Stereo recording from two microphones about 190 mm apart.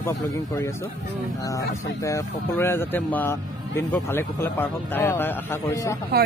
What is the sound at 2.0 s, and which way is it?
Speech, 15° left (ahead or behind).